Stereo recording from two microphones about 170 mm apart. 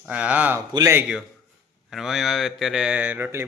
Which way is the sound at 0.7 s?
20° right (ahead or behind).